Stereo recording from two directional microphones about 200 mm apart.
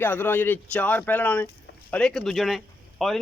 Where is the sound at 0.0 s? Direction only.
10° left (ahead or behind).